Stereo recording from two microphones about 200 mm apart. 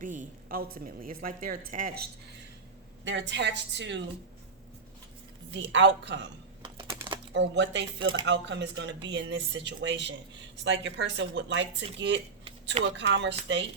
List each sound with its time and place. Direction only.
0.0 s a woman's voice: 40° right (ahead or behind)
3.0 s speech: 65° right (ahead or behind)
5.5 s speech: 60° right (ahead or behind)
7.3 s speech: 60° right (ahead or behind)